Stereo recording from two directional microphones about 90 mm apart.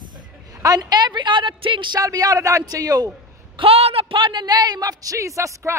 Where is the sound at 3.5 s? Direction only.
85° right; by 5.7 s 35° right (ahead or behind).